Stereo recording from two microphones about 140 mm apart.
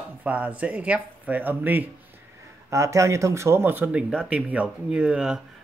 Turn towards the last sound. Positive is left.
turn(degrees=-5)  # may be behind; listen again after turning